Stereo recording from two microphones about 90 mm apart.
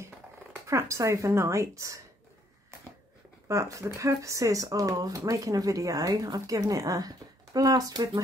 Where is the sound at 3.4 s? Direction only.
35° right (ahead or behind).